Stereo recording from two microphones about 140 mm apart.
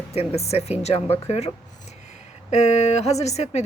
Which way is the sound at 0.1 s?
45° left (ahead or behind).